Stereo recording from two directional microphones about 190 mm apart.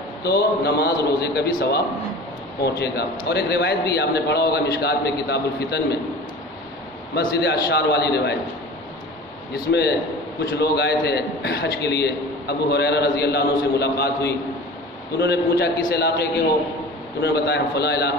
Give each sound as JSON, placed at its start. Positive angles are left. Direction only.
{"t": 0.2, "sound": "a man's voice", "side_deg": 60}
{"t": 2.8, "sound": "a man's voice", "side_deg": 60}
{"t": 7.3, "sound": "a man's voice", "side_deg": 60}
{"t": 9.7, "sound": "a man's voice", "side_deg": 60}